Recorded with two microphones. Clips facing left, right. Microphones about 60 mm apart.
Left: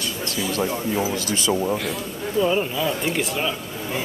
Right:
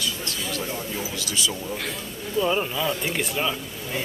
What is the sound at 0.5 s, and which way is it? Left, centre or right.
Speech, left.